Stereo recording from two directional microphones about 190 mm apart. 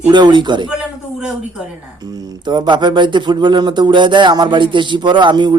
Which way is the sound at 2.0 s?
20° right (ahead or behind).